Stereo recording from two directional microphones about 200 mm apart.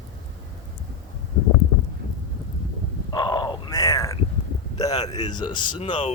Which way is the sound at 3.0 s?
20° left (ahead or behind).